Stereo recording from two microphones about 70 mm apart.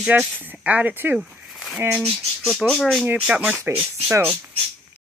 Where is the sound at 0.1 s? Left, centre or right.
Right.